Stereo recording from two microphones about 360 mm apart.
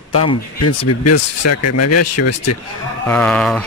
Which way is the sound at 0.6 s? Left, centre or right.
Left.